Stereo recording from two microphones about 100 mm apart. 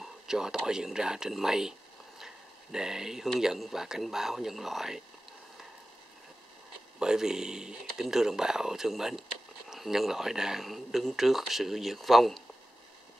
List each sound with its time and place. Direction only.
0.0 s speech: 5° right (ahead or behind)
7.0 s speech: 5° right (ahead or behind)